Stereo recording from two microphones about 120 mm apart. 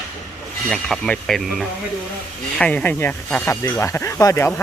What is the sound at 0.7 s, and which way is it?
Speech, 5° left (ahead or behind).